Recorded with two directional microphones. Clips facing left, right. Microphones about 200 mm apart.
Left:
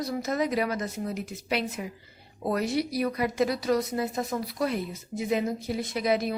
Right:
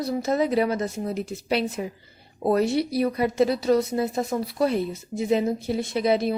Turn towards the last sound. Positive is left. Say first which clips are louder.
# right 4 dB
turn(degrees=-30)  # may be behind; listen again after turning